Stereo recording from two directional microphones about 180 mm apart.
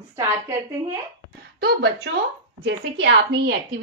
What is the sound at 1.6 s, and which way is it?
A woman's voice, 70° right (ahead or behind).